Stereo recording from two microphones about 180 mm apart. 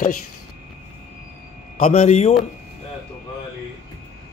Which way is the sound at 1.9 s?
35° left (ahead or behind).